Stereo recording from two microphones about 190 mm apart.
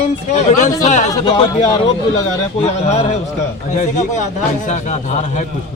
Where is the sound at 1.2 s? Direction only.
25° left (ahead or behind).